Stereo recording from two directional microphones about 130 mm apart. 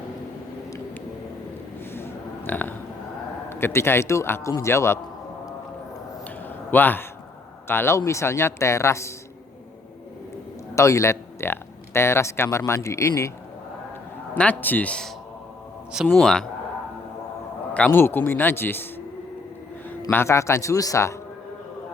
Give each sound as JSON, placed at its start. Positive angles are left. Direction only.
{"t": 1.9, "sound": "a sound", "side_deg": 15}
{"t": 3.5, "sound": "a man's voice", "side_deg": 20}
{"t": 6.2, "sound": "a sound", "side_deg": 15}
{"t": 7.7, "sound": "a man's voice", "side_deg": 20}
{"t": 10.8, "sound": "speech", "side_deg": 25}
{"t": 14.3, "sound": "speech", "side_deg": 10}
{"t": 16.1, "sound": "speech", "side_deg": 5}
{"t": 17.7, "sound": "speech", "side_deg": 15}
{"t": 20.1, "sound": "a man's voice", "side_deg": 20}